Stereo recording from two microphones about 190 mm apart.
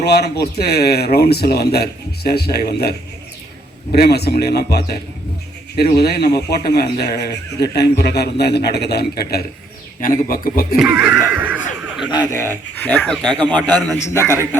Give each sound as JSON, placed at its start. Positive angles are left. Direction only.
{"t": 0.0, "sound": "speech", "side_deg": 60}
{"t": 3.9, "sound": "a man's voice", "side_deg": 55}
{"t": 10.8, "sound": "speech", "side_deg": -5}
{"t": 11.3, "sound": "neigh", "side_deg": -10}
{"t": 12.1, "sound": "speech", "side_deg": 15}